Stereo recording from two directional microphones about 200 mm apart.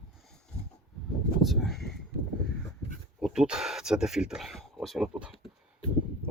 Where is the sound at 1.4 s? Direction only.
Centre (ahead or behind).